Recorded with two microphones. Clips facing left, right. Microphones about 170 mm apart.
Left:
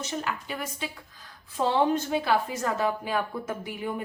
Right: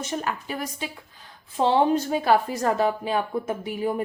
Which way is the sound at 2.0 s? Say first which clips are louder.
Right 4 dB; 45° right (ahead or behind).